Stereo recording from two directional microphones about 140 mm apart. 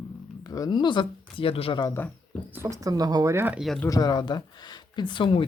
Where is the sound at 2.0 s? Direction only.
15° left (ahead or behind).